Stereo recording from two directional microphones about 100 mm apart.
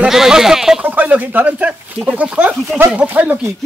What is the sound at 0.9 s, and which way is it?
A man's voice, 15° right (ahead or behind).